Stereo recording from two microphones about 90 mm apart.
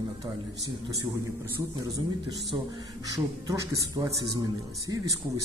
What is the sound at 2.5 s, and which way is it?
Speech, 45° right (ahead or behind).